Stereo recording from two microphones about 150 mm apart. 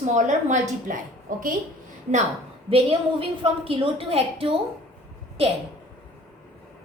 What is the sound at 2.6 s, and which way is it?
A woman's voice, 40° right (ahead or behind).